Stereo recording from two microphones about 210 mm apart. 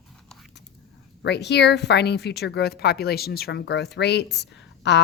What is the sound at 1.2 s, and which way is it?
Speech, 55° left (ahead or behind).